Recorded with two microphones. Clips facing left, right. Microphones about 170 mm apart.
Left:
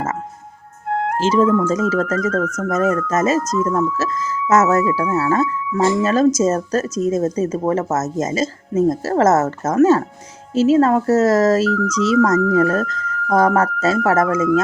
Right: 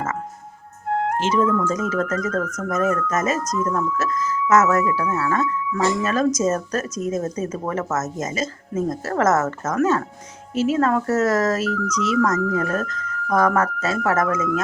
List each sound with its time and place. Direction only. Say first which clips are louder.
0.9 s music: left 1 dB; 70° left (ahead or behind)
1.2 s speech: left 7 dB; 30° left (ahead or behind)